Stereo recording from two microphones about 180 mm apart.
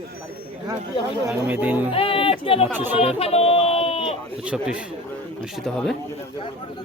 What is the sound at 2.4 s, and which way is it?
Speech, 30° left (ahead or behind).